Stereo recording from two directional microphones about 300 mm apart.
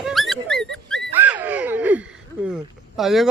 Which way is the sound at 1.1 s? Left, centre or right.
Centre.